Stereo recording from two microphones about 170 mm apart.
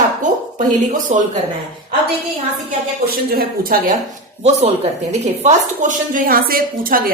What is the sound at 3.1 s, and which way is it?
Speech, 60° right (ahead or behind).